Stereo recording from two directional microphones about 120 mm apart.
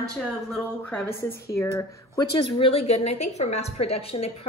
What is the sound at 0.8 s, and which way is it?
A woman's voice, 15° left (ahead or behind).